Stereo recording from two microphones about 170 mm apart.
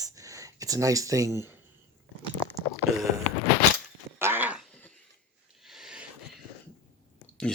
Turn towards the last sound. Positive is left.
turn(degrees=5)  # may be behind; listen again after turning